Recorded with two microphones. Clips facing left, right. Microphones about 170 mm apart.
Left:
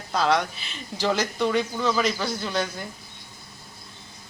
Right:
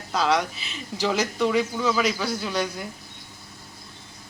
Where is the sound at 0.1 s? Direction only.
5° right (ahead or behind).